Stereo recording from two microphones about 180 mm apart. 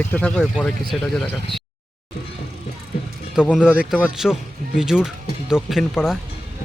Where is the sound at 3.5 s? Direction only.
5° right (ahead or behind).